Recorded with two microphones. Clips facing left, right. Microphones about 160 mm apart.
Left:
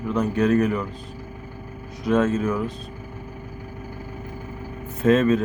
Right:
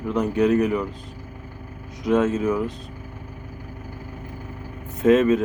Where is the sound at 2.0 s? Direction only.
20° right (ahead or behind).